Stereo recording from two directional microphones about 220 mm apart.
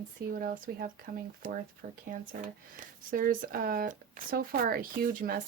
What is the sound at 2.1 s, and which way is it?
Speech, 40° right (ahead or behind).